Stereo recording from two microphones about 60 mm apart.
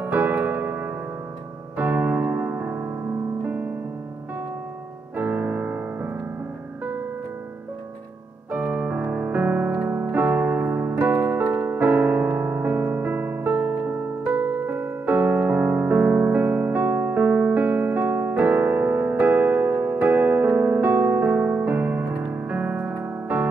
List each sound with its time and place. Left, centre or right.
0.0 s piano: right
5.1 s music: right
8.5 s piano: right
10.1 s keyboard: right
11.6 s electric piano: right
14.3 s keyboard: right
19.1 s electric piano: right